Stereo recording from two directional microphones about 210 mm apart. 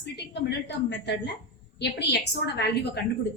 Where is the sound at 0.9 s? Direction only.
55° left (ahead or behind).